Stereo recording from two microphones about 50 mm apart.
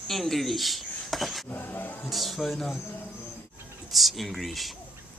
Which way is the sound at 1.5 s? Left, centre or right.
Left.